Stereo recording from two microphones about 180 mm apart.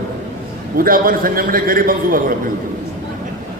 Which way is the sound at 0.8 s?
50° right (ahead or behind).